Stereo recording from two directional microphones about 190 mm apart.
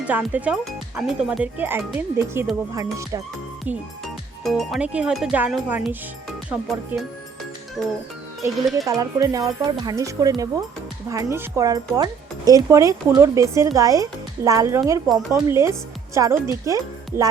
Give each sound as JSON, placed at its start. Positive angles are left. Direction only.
{"t": 0.0, "sound": "speech", "side_deg": -10}
{"t": 7.8, "sound": "speech", "side_deg": 0}
{"t": 8.9, "sound": "speech", "side_deg": -20}